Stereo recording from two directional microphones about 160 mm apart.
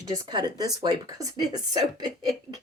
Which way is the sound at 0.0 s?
25° right (ahead or behind).